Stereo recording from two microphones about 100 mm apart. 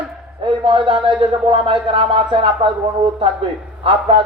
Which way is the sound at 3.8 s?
60° right (ahead or behind).